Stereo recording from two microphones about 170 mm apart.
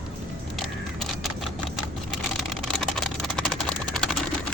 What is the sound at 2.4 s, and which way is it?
Vehicle, 5° left (ahead or behind).